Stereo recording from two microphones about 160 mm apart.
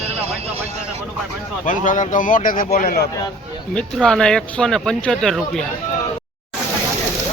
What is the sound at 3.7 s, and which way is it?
Speech, 5° left (ahead or behind).